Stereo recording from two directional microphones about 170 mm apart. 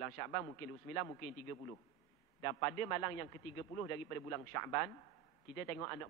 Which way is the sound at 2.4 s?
20° left (ahead or behind).